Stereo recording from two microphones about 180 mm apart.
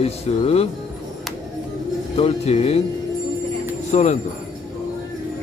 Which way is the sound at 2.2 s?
35° left (ahead or behind).